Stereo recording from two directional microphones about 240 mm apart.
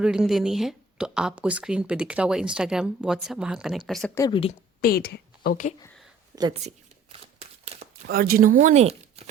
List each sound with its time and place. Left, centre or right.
0.0 s speech: centre
4.2 s a woman's voice: left
4.8 s a woman's voice: left
6.3 s a sound: right
8.0 s speech: right